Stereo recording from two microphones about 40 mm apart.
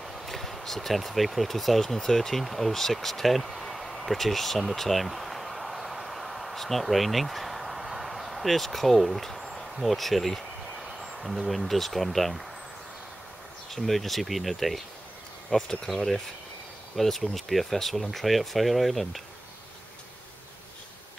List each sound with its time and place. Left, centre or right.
0.0 s speech: centre
2.0 s a sound: centre
11.0 s speech: centre
13.7 s speech: centre
15.5 s speech: left
15.9 s speech: centre